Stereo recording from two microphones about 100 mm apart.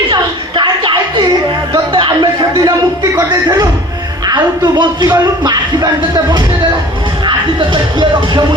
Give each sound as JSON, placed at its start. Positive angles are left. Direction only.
{"t": 0.1, "sound": "music", "side_deg": -50}